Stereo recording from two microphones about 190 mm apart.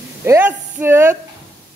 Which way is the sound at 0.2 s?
10° right (ahead or behind).